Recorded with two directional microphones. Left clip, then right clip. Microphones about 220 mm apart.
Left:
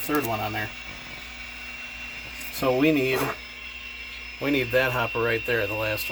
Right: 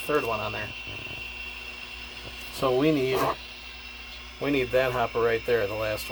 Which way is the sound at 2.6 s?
Centre (ahead or behind).